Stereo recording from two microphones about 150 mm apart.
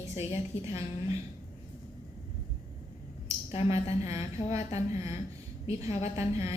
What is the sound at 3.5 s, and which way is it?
A woman's voice, 45° left (ahead or behind).